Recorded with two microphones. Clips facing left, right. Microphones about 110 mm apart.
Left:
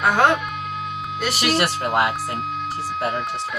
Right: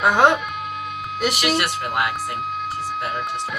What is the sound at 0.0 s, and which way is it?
Speech, 10° right (ahead or behind).